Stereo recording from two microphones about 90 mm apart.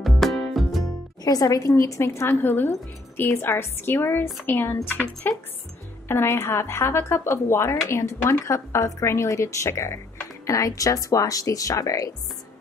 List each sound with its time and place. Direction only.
0.0 s music: centre (ahead or behind)
1.2 s a woman's voice: 40° left (ahead or behind)